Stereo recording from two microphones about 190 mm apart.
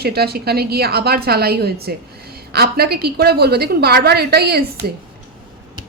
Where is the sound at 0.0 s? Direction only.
55° right (ahead or behind).